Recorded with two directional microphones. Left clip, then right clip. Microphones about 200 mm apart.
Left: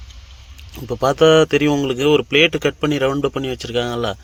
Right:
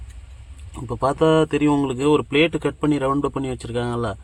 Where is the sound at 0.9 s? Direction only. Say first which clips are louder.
Left 5 dB; 10° left (ahead or behind).